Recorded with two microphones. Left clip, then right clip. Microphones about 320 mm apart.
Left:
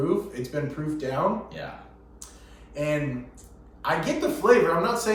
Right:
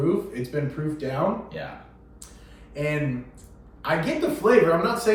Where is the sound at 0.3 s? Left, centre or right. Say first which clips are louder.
Right 1 dB; centre.